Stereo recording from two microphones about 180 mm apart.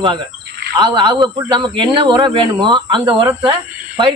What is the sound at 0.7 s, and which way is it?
Speech, 25° right (ahead or behind).